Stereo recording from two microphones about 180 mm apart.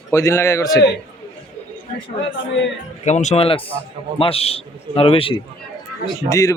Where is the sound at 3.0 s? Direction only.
40° left (ahead or behind).